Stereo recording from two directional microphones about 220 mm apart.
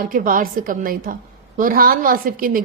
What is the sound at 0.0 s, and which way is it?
A woman's voice, 40° right (ahead or behind).